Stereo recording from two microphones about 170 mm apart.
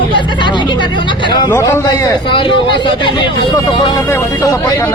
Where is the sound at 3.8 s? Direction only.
20° left (ahead or behind).